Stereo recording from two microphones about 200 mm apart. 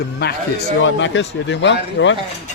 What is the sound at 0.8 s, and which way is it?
Speech, 65° left (ahead or behind).